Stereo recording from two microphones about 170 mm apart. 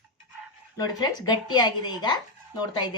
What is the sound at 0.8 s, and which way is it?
A woman's voice, 25° left (ahead or behind).